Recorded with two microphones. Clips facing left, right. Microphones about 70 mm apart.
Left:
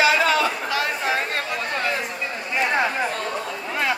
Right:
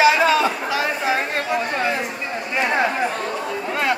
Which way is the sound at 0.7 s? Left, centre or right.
Centre.